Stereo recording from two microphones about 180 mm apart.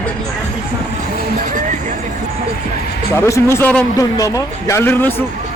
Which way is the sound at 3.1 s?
15° left (ahead or behind).